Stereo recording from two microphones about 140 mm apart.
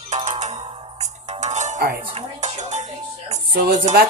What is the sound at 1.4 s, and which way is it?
Music, 55° right (ahead or behind).